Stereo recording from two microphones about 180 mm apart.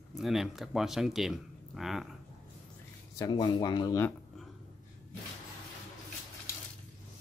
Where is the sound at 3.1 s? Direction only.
20° left (ahead or behind).